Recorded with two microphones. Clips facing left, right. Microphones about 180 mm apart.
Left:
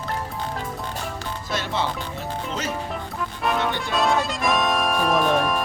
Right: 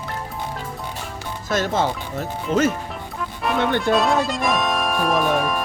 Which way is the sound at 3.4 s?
Centre (ahead or behind).